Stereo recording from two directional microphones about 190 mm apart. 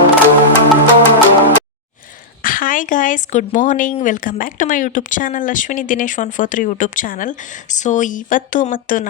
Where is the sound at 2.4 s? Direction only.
45° left (ahead or behind).